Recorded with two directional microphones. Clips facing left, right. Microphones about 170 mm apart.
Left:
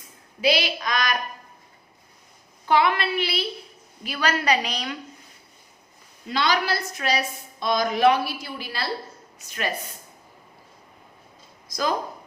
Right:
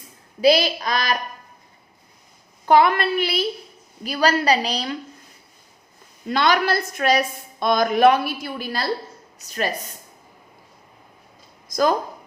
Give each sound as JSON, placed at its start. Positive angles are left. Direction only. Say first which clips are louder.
{"t": 0.4, "sound": "a woman's voice", "louder": "right 6 dB", "side_deg": -40}
{"t": 2.6, "sound": "a woman's voice", "louder": "right 5 dB", "side_deg": -45}
{"t": 6.2, "sound": "a woman's voice", "louder": "right 4 dB", "side_deg": -50}